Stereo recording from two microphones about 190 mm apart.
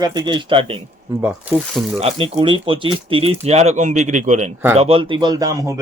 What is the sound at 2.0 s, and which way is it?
Speech, 25° right (ahead or behind).